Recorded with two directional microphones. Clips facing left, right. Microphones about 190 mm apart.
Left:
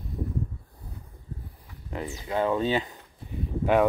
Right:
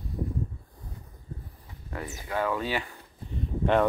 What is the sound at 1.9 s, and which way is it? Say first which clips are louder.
Speech: left 3 dB; 20° left (ahead or behind).